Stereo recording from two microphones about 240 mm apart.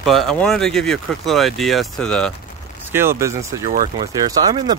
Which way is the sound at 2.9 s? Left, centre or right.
Centre.